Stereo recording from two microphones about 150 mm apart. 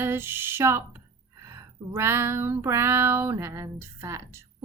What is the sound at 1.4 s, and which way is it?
Child singing, 15° right (ahead or behind).